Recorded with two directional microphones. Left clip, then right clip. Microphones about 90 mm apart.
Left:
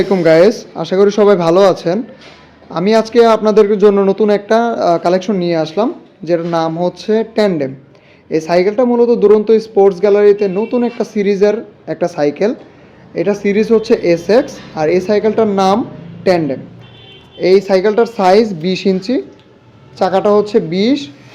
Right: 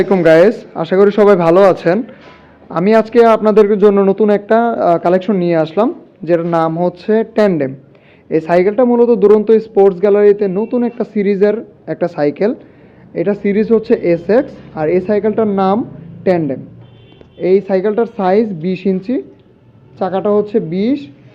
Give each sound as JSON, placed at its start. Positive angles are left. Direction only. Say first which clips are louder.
{"t": 0.0, "sound": "speech", "louder": "even", "side_deg": 30}
{"t": 20.2, "sound": "speech", "louder": "left 2 dB", "side_deg": 25}